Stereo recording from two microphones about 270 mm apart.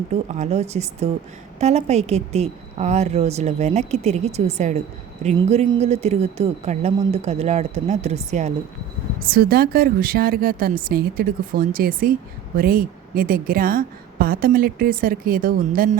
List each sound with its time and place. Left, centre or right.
0.1 s a woman's voice: right